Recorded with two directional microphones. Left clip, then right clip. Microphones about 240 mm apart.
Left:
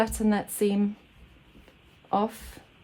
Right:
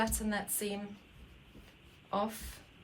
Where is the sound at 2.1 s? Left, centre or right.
Left.